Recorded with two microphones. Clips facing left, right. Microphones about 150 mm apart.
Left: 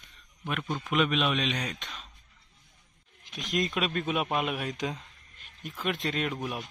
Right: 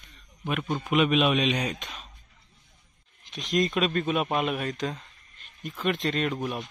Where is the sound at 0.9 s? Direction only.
10° right (ahead or behind).